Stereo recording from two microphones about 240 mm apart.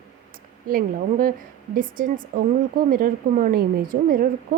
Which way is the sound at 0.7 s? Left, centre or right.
Right.